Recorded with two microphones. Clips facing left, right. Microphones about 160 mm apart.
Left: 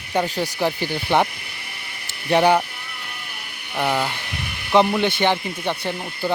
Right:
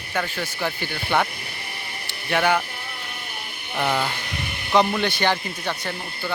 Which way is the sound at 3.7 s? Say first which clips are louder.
Left 1 dB; 15° left (ahead or behind).